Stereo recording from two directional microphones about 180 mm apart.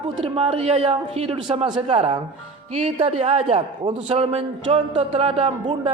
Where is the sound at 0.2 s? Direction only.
35° right (ahead or behind).